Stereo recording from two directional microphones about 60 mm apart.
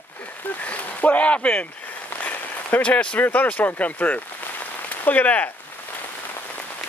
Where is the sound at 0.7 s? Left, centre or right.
Left.